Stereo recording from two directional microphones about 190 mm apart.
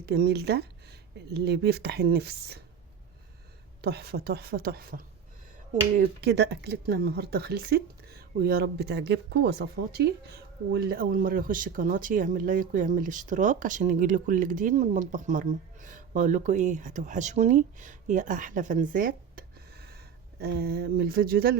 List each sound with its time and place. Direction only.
0.0 s speech: 60° right (ahead or behind)
3.8 s speech: 60° right (ahead or behind)
6.0 s speech: 60° right (ahead or behind)